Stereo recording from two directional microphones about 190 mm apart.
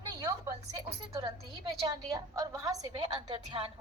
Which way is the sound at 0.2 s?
20° right (ahead or behind).